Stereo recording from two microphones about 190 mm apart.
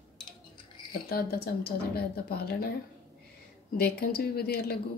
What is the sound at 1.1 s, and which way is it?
Speech, 55° left (ahead or behind).